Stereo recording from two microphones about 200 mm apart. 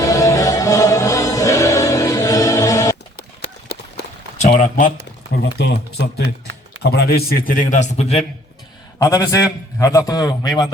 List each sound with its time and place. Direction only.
0.0 s music: 15° left (ahead or behind)
3.7 s run: 55° left (ahead or behind)
4.4 s a sound: 35° left (ahead or behind)
5.4 s a man's voice: 55° left (ahead or behind); by 8.2 s 35° left (ahead or behind)
9.0 s a man's voice: 15° left (ahead or behind)